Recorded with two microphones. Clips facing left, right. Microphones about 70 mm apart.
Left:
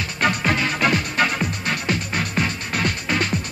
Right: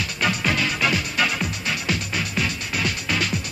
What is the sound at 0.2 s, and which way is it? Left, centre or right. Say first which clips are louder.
Music: left 3 dB; left.